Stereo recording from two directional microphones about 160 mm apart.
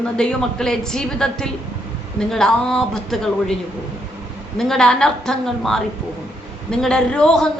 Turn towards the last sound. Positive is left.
turn(degrees=5)  # may be behind; listen again after turning